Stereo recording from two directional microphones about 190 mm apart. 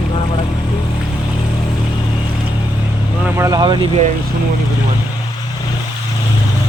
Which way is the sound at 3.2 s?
15° right (ahead or behind).